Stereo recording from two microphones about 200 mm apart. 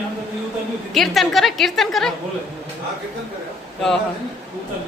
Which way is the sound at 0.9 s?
Centre (ahead or behind).